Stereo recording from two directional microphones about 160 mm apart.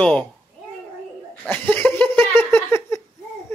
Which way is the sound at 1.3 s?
10° left (ahead or behind).